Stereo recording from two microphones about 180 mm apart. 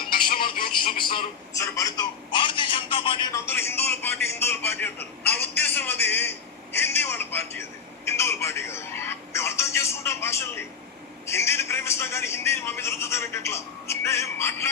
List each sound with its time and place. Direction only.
0.3 s music: 25° left (ahead or behind)
0.9 s a sound: 25° left (ahead or behind)
4.4 s a man's voice: 15° left (ahead or behind)